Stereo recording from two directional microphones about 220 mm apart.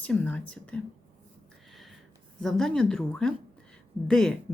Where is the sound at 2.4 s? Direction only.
Centre (ahead or behind).